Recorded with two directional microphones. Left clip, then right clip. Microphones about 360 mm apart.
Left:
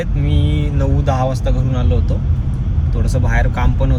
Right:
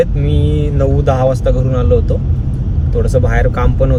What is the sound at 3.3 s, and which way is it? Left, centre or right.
Speech, centre.